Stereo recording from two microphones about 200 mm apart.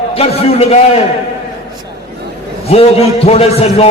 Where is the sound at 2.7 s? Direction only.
30° left (ahead or behind).